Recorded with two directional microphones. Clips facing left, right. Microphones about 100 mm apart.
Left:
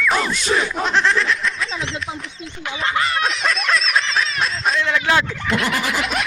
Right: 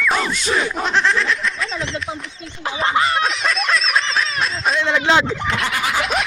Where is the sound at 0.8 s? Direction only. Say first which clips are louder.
Even; centre (ahead or behind).